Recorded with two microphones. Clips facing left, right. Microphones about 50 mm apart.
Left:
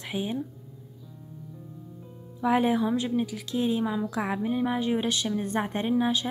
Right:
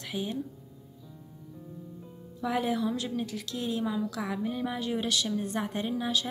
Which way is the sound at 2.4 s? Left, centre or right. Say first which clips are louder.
Left 5 dB; left.